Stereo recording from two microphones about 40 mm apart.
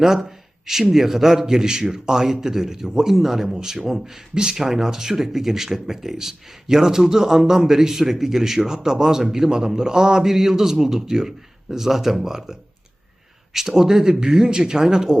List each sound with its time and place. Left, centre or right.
0.0 s a man's voice: centre